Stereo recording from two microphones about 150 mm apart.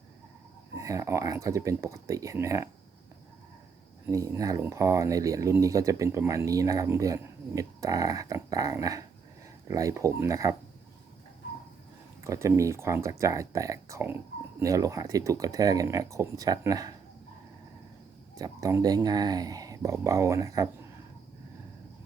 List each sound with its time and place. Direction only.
0.8 s speech: 20° right (ahead or behind)
4.0 s speech: 20° right (ahead or behind)
12.2 s speech: 20° right (ahead or behind)
18.3 s speech: 25° right (ahead or behind)